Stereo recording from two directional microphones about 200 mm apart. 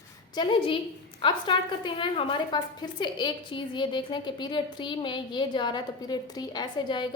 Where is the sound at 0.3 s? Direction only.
25° left (ahead or behind).